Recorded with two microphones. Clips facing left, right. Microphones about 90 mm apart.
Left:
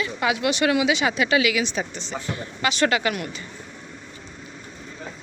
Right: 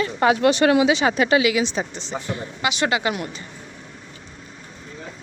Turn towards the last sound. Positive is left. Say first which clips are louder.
# even
turn(degrees=-25)  # may be behind; listen again after turning